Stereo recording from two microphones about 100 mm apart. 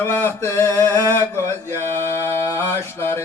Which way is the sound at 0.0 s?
20° left (ahead or behind).